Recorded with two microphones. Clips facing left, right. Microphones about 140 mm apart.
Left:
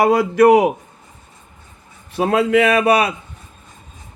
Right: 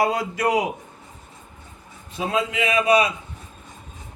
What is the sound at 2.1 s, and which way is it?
Speech, 65° left (ahead or behind).